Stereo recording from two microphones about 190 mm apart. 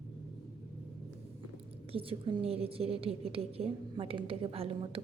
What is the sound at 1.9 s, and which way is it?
A woman's voice, 30° right (ahead or behind).